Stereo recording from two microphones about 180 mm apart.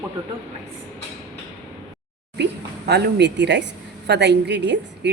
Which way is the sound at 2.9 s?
70° right (ahead or behind).